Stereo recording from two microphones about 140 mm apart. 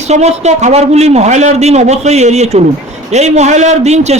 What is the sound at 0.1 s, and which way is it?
A man's voice, 55° right (ahead or behind).